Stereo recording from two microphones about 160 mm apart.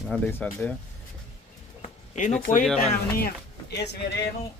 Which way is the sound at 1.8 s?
50° left (ahead or behind).